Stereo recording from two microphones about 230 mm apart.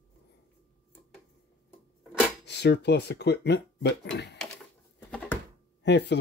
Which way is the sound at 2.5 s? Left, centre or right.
Left.